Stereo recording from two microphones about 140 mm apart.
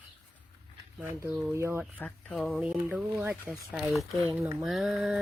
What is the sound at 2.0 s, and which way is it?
Speech, 5° left (ahead or behind).